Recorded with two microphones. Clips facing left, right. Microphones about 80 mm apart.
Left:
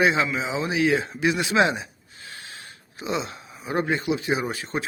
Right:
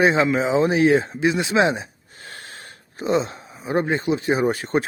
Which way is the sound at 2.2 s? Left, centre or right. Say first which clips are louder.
Right 2 dB; right.